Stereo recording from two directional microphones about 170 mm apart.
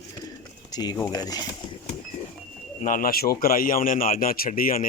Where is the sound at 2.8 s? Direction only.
55° left (ahead or behind).